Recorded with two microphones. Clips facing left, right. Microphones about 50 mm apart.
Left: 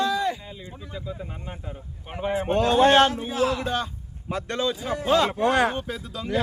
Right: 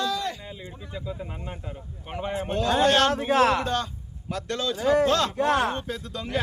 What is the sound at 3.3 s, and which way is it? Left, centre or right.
Speech, right.